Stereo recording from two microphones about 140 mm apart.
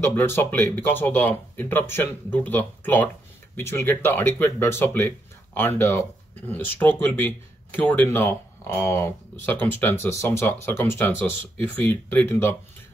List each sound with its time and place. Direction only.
0.0 s speech: 15° left (ahead or behind)